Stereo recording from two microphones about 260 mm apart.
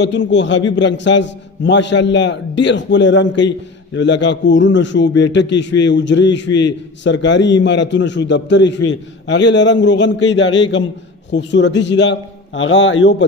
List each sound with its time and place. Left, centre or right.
0.0 s a man's voice: left